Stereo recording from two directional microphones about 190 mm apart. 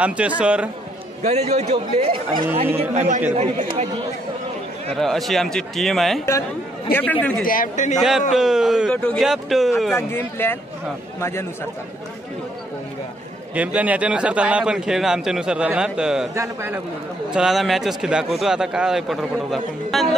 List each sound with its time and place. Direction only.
0.0 s a man's voice: 5° right (ahead or behind)
1.2 s speech: 35° right (ahead or behind)
4.9 s a man's voice: centre (ahead or behind)
7.4 s a man's voice: 45° left (ahead or behind)
8.3 s a man's voice: 5° right (ahead or behind)
9.9 s speech: 10° left (ahead or behind)
13.6 s a man's voice: 5° right (ahead or behind)
17.3 s a man's voice: centre (ahead or behind)